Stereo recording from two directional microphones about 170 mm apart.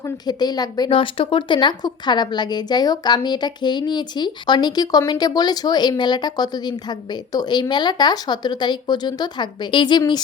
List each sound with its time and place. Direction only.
0.3 s speech: 25° left (ahead or behind)